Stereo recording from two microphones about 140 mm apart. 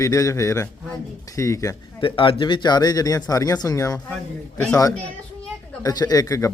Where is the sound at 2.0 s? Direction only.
40° left (ahead or behind).